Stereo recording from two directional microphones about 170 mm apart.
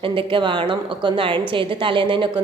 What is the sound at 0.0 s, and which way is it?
Speech, 30° right (ahead or behind).